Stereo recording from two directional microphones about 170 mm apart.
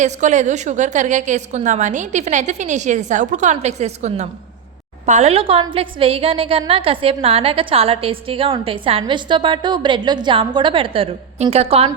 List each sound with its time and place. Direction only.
0.0 s a woman's voice: 45° right (ahead or behind)